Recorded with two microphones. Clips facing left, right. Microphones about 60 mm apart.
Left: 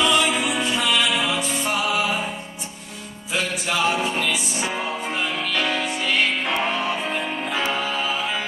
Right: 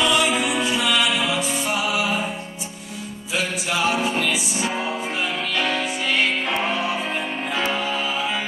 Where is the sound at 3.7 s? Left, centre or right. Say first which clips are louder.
Even; centre.